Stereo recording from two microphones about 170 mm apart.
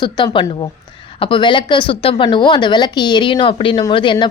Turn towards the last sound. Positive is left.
turn(degrees=30)  # may be behind; listen again after turning